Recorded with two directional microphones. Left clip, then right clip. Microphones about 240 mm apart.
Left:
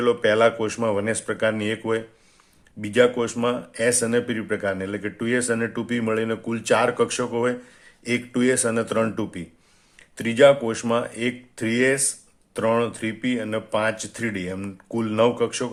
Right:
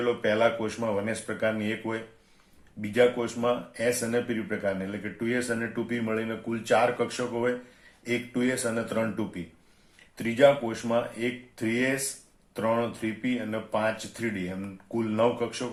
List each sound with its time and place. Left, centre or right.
0.0 s speech: left